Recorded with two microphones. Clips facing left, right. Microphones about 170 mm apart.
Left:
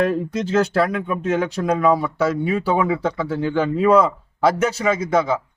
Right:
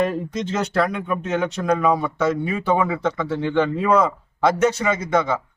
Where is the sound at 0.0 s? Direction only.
5° left (ahead or behind).